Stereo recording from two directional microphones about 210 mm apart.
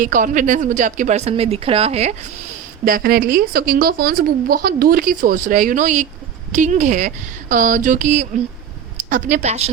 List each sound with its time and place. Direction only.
0.0 s a woman's voice: 40° right (ahead or behind)
2.8 s a woman's voice: 45° right (ahead or behind)